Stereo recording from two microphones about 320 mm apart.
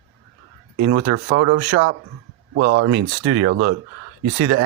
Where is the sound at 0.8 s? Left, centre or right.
Right.